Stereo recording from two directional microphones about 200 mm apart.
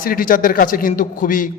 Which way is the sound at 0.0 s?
45° left (ahead or behind).